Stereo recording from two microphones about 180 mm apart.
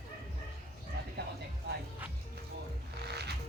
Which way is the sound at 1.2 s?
65° right (ahead or behind).